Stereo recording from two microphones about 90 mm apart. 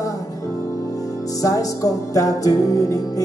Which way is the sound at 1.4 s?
40° left (ahead or behind).